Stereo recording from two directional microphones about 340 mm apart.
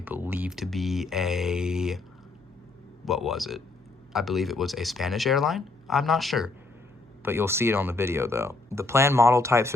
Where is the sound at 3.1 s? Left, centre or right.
Centre.